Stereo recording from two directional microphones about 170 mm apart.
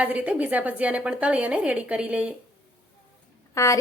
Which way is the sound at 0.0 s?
10° right (ahead or behind).